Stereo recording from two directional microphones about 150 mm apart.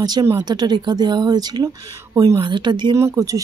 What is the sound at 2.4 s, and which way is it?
Speech, 30° right (ahead or behind).